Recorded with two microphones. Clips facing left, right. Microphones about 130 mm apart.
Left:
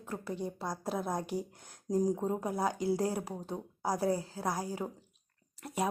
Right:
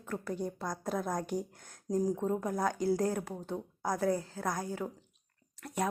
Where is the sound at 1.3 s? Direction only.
10° left (ahead or behind).